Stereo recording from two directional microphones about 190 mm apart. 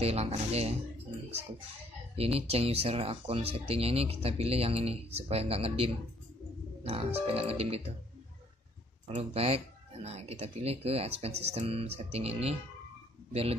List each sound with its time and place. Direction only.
0.0 s speech: 35° right (ahead or behind)
2.1 s speech: 30° right (ahead or behind)
9.1 s speech: 30° right (ahead or behind)